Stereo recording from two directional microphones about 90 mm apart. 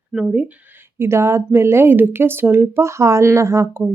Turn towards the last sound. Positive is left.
turn(degrees=-30)  # may be behind; listen again after turning